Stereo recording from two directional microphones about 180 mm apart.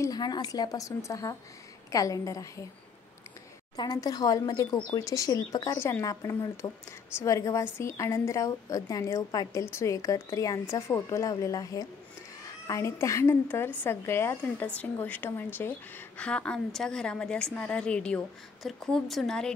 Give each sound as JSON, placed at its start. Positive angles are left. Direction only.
{"t": 0.0, "sound": "a woman's voice", "side_deg": 20}
{"t": 3.7, "sound": "a woman's voice", "side_deg": 20}